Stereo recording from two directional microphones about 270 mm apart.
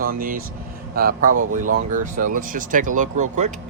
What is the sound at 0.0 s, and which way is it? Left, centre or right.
Speech, right.